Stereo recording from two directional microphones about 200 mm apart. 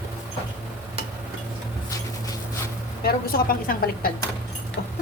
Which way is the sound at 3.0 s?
50° left (ahead or behind).